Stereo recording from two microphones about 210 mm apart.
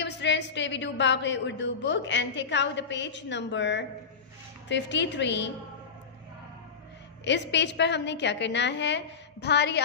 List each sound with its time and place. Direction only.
0.0 s a woman's voice: 55° left (ahead or behind)
7.2 s a woman's voice: 55° left (ahead or behind)